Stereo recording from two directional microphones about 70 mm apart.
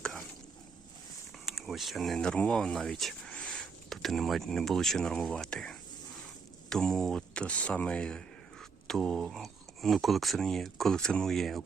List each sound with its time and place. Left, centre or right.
1.5 s speech: centre
8.9 s speech: centre